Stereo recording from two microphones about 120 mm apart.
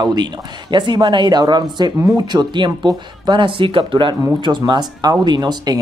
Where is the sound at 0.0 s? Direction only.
35° right (ahead or behind).